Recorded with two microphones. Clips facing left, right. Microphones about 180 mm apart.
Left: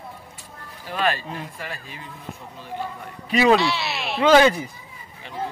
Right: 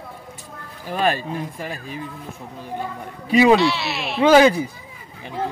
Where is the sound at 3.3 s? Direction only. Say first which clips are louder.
Right 3 dB; 15° right (ahead or behind).